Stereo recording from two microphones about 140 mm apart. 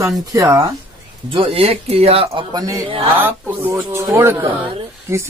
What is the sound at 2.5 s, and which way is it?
Speech, 25° right (ahead or behind).